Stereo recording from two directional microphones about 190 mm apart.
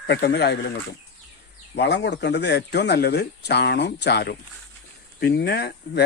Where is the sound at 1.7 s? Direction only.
65° left (ahead or behind).